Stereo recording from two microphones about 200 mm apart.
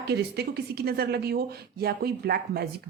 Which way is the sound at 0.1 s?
55° right (ahead or behind).